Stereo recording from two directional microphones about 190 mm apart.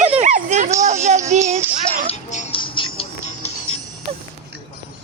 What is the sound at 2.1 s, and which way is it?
Music, 30° left (ahead or behind).